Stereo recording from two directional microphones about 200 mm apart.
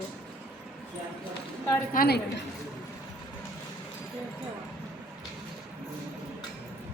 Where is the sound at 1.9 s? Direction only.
50° left (ahead or behind).